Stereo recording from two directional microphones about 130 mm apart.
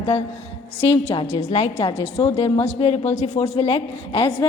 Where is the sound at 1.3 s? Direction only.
60° left (ahead or behind).